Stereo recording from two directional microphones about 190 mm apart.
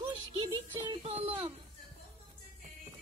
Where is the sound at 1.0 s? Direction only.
35° right (ahead or behind).